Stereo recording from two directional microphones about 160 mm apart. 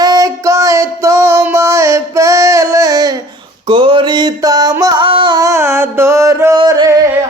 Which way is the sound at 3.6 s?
35° right (ahead or behind).